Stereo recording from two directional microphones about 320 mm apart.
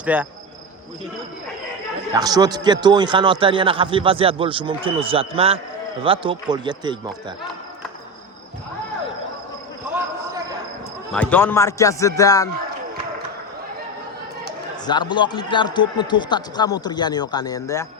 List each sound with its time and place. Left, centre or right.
0.0 s cricket: centre
2.1 s a man's voice: centre
11.1 s a man's voice: centre
14.8 s a man's voice: centre